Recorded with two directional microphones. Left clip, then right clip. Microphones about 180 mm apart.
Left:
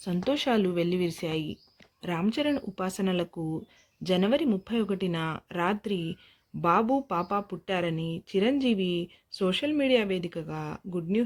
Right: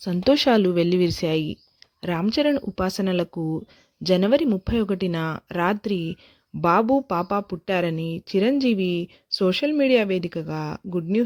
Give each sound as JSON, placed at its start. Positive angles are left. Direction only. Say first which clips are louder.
{"t": 0.0, "sound": "a woman's voice", "louder": "right 9 dB", "side_deg": -45}